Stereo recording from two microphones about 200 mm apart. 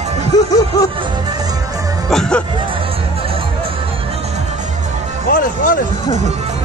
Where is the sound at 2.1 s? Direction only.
5° left (ahead or behind).